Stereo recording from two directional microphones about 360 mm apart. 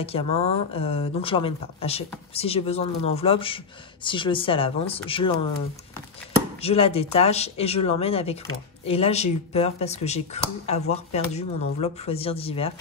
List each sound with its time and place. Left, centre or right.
0.0 s speech: centre
6.6 s speech: centre